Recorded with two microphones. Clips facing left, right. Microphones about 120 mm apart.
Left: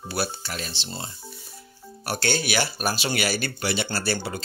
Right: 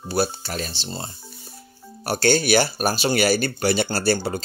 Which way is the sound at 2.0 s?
40° right (ahead or behind).